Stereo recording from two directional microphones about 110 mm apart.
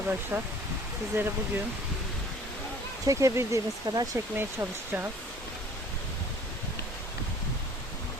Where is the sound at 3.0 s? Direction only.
30° right (ahead or behind).